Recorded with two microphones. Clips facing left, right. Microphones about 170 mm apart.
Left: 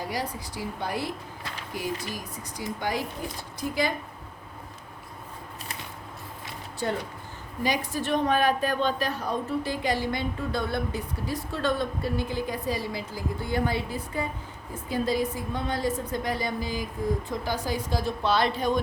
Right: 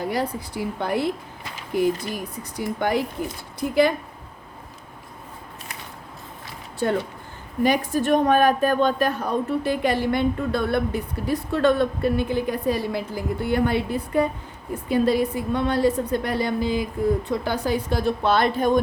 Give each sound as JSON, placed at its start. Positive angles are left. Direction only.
{"t": 0.1, "sound": "a woman's voice", "side_deg": -55}
{"t": 7.6, "sound": "a woman's voice", "side_deg": -50}